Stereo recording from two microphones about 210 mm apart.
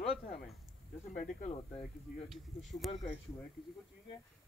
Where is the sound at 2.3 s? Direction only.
Centre (ahead or behind).